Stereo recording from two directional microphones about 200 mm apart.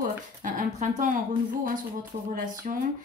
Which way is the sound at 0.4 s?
40° right (ahead or behind).